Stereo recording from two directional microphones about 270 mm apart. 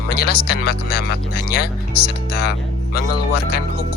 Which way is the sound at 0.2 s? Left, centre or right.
Left.